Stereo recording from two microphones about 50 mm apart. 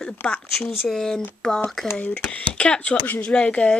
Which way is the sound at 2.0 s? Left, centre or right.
Left.